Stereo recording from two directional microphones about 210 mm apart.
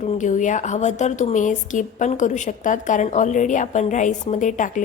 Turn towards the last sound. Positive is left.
turn(degrees=35)  # may be behind; listen again after turning